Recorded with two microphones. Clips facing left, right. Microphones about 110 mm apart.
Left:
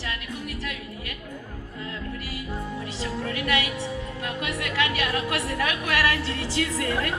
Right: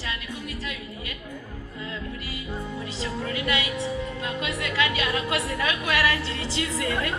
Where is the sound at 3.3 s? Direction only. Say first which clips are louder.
Left 1 dB; 20° right (ahead or behind).